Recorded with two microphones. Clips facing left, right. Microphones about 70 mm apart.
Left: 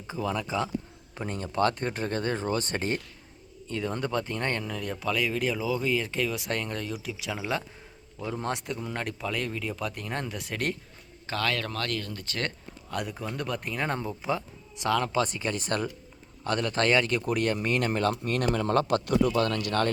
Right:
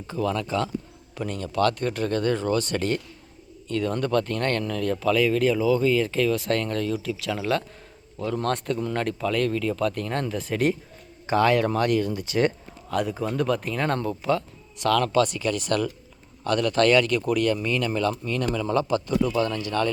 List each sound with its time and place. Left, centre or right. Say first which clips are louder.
0.1 s speech: right 4 dB; centre
1.1 s speech: right 3 dB; left; by 10.8 s centre
11.3 s speech: right 10 dB; right
12.9 s speech: right 7 dB; centre; by 19.9 s left